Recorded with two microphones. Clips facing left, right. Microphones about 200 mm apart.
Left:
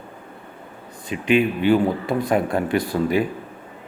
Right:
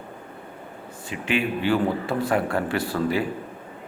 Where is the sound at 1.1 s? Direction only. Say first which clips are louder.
Left 6 dB; 20° left (ahead or behind).